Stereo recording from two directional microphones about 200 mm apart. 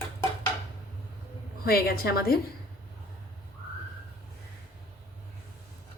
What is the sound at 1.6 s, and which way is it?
Speech, 50° left (ahead or behind).